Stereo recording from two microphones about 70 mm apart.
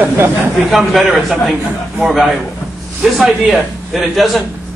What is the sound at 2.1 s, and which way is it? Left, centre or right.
A man's voice, centre.